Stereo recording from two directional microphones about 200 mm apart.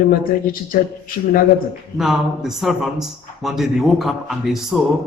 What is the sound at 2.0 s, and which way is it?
Speech, centre (ahead or behind).